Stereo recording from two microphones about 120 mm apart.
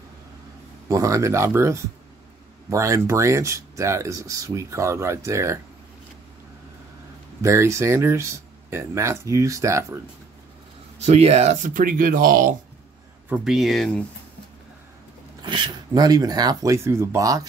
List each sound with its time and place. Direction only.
0.8 s speech: 25° right (ahead or behind)
7.4 s speech: 25° right (ahead or behind)
11.0 s speech: 65° right (ahead or behind)
13.4 s speech: centre (ahead or behind)
15.4 s speech: 40° right (ahead or behind)